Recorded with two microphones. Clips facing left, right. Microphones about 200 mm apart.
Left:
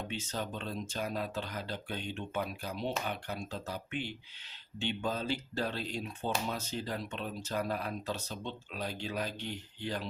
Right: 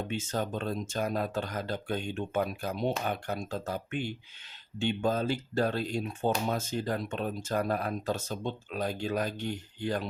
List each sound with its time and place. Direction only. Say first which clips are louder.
0.1 s speech: right 6 dB; 50° right (ahead or behind)